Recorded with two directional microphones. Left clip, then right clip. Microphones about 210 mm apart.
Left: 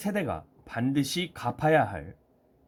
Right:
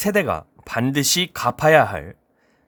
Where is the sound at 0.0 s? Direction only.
45° right (ahead or behind).